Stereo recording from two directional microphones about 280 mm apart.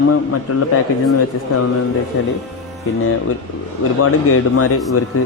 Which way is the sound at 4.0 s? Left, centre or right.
Left.